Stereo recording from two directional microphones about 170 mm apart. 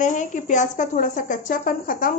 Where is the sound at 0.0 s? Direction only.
45° left (ahead or behind).